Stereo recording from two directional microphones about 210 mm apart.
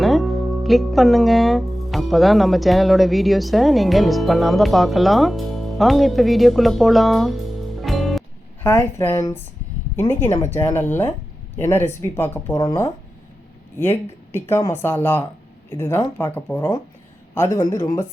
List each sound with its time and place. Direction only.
0.0 s speech: centre (ahead or behind); by 18.0 s 15° left (ahead or behind)